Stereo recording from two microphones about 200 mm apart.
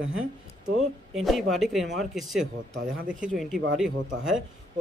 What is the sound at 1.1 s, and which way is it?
Speech, centre (ahead or behind).